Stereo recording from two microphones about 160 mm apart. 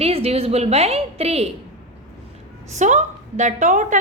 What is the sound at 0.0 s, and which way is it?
A woman's voice, 40° right (ahead or behind).